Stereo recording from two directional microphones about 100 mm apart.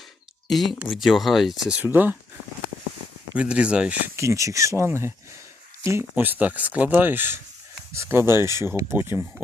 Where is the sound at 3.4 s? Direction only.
10° right (ahead or behind).